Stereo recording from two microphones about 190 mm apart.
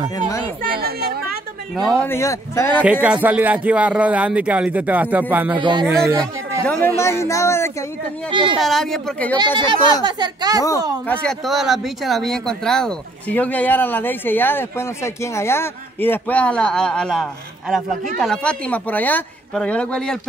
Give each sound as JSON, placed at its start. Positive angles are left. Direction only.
{"t": 0.6, "sound": "a woman's voice", "side_deg": -55}
{"t": 1.9, "sound": "speech", "side_deg": 10}
{"t": 2.8, "sound": "a man's voice", "side_deg": -5}
{"t": 5.6, "sound": "speech", "side_deg": -25}
{"t": 6.6, "sound": "speech", "side_deg": 10}
{"t": 8.5, "sound": "speech", "side_deg": 0}
{"t": 9.4, "sound": "speech", "side_deg": -25}
{"t": 11.1, "sound": "speech", "side_deg": 0}